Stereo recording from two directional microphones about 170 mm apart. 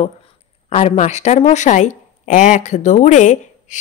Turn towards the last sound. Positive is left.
turn(degrees=45)  # may be behind; listen again after turning